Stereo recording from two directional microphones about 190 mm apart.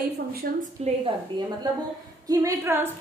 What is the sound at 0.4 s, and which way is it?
Speech, 50° right (ahead or behind).